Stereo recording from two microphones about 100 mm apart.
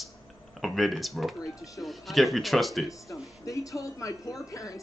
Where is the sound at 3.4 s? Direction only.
35° left (ahead or behind).